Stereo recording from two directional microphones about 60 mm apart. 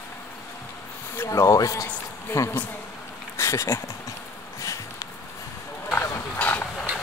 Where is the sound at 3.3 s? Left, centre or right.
Left.